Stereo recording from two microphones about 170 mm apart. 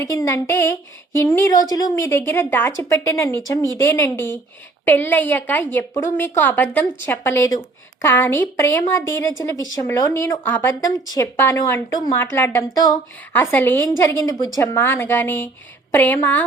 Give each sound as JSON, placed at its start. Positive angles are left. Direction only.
{"t": 0.0, "sound": "a woman's voice", "side_deg": 20}